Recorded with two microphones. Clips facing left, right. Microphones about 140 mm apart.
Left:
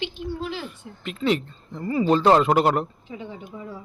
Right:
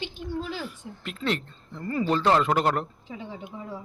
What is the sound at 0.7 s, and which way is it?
Speech, centre (ahead or behind).